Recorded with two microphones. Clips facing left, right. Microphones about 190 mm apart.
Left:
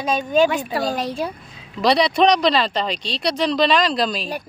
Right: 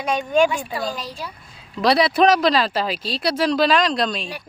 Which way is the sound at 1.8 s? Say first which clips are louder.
Even; centre (ahead or behind).